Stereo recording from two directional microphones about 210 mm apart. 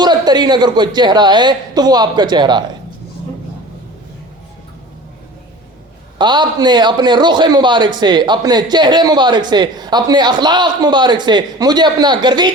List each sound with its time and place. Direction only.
0.0 s speech: 20° right (ahead or behind)
6.1 s speech: 20° right (ahead or behind)